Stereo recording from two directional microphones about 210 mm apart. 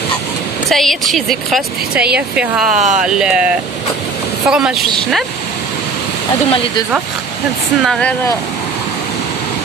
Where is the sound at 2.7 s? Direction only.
35° right (ahead or behind).